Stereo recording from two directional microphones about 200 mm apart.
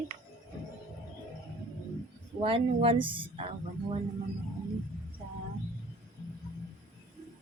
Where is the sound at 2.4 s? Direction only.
25° right (ahead or behind).